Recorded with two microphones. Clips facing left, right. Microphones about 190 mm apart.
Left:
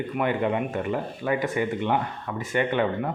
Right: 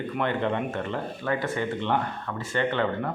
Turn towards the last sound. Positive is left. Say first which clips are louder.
# left 1 dB
turn(degrees=15)  # may be behind; listen again after turning